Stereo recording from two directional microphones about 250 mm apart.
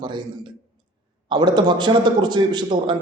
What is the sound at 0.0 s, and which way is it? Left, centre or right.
A man's voice, centre.